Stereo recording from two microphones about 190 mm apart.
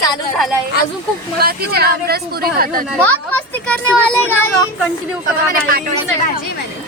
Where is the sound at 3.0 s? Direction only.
10° left (ahead or behind).